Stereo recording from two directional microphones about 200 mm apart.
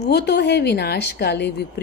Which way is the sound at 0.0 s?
55° left (ahead or behind).